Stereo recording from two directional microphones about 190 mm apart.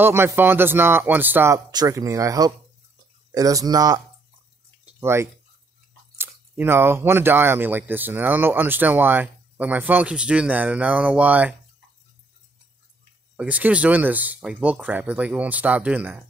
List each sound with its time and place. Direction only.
0.0 s speech: 10° right (ahead or behind)
4.8 s a sound: 15° right (ahead or behind)
6.1 s speech: 10° right (ahead or behind)
13.4 s speech: 5° right (ahead or behind)